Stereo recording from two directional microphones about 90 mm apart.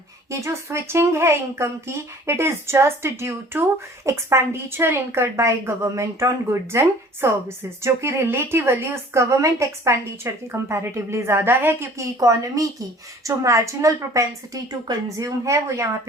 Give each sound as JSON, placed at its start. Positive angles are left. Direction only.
{"t": 0.3, "sound": "a woman's voice", "side_deg": -35}